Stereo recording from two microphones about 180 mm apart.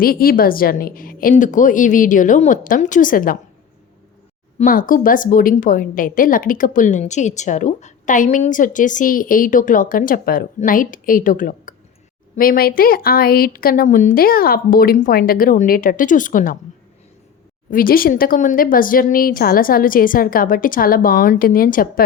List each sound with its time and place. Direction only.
0.0 s a woman's voice: 55° left (ahead or behind)
4.5 s a woman's voice: 50° left (ahead or behind)
17.7 s a woman's voice: 50° left (ahead or behind)